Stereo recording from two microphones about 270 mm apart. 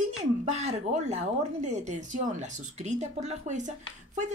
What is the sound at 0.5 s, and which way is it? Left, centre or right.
Speech, right.